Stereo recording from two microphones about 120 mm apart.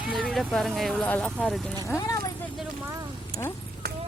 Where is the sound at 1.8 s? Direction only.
25° left (ahead or behind).